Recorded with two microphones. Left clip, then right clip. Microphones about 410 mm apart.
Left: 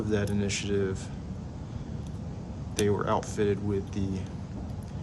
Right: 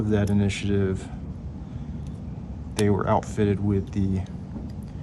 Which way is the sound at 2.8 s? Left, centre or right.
Centre.